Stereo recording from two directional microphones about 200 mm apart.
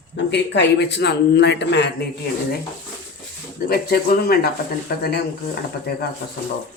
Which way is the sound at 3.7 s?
50° left (ahead or behind).